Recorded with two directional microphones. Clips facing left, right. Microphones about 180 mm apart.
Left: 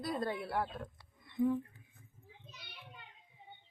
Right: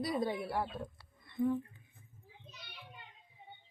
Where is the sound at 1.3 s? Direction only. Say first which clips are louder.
Left 1 dB; 15° left (ahead or behind).